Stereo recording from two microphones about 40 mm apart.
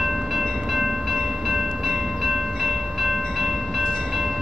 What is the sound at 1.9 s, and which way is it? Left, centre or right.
Train, centre.